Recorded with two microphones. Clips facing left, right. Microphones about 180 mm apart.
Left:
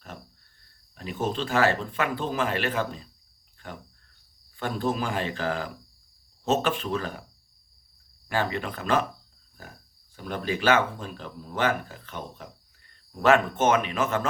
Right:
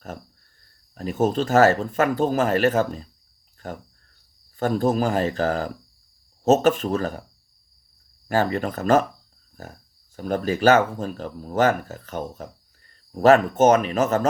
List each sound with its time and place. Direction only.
0.9 s speech: 45° right (ahead or behind)
8.3 s speech: 40° right (ahead or behind)